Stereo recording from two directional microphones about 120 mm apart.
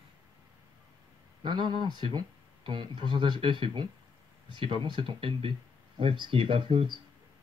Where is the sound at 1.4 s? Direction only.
40° right (ahead or behind).